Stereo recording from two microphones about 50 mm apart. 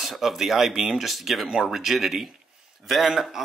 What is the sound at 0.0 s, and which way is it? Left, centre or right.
Speech, centre.